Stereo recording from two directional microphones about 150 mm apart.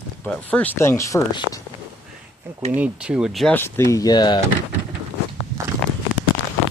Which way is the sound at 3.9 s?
25° left (ahead or behind).